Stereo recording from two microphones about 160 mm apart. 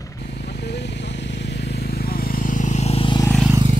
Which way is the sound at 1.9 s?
70° left (ahead or behind).